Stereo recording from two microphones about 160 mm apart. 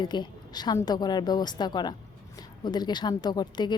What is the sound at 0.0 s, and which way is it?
A woman's voice, 25° left (ahead or behind).